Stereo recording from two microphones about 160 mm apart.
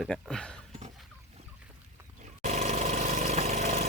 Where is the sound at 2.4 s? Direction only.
45° right (ahead or behind).